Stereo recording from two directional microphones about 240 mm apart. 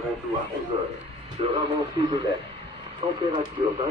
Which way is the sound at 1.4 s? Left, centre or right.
Right.